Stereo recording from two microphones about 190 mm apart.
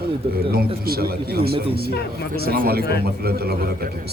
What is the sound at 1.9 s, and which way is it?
Speech, 60° left (ahead or behind).